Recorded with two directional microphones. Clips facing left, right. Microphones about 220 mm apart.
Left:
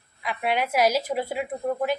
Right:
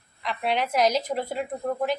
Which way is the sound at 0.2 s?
5° left (ahead or behind).